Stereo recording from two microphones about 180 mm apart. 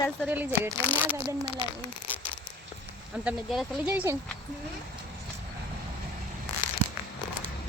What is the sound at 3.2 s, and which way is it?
Speech, 5° right (ahead or behind).